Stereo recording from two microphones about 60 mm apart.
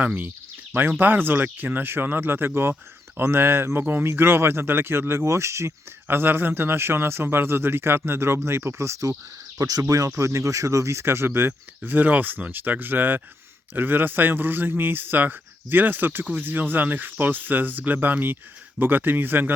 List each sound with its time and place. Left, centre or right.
0.0 s speech: right
6.1 s speech: right
9.6 s speech: right